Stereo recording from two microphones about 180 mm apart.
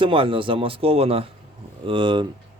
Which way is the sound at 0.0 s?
30° right (ahead or behind).